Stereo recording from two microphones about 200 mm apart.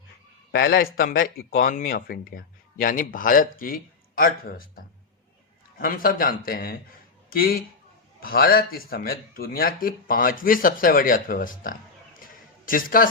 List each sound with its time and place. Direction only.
0.5 s speech: 50° left (ahead or behind)
5.8 s speech: 45° left (ahead or behind)
12.2 s a sound: 45° left (ahead or behind)